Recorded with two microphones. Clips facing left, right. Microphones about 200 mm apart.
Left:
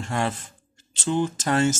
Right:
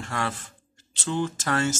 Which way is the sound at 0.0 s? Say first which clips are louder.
Left 4 dB; 20° left (ahead or behind).